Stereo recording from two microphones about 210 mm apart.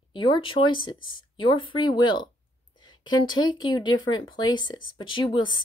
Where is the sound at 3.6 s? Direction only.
20° left (ahead or behind).